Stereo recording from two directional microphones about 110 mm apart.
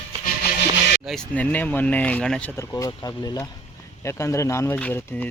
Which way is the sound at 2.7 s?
30° left (ahead or behind).